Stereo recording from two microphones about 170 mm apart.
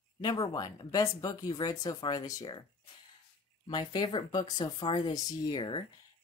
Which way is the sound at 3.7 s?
25° left (ahead or behind).